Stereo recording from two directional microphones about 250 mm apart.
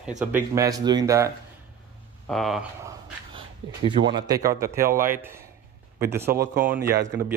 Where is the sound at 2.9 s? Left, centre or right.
Centre.